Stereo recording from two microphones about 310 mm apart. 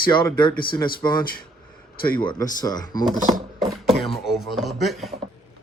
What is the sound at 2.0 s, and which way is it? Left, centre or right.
Speech, centre.